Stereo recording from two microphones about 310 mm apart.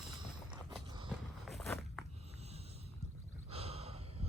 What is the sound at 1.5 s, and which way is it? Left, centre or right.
Walk, centre.